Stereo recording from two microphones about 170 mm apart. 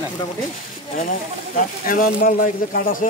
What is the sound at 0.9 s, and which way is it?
A man's voice, 55° left (ahead or behind).